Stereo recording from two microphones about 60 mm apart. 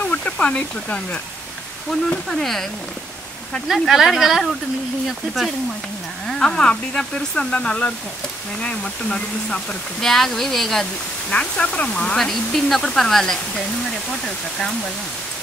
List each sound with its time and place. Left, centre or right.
0.1 s speech: left
2.0 s speech: centre
3.6 s speech: centre
6.2 s speech: centre
11.2 s speech: centre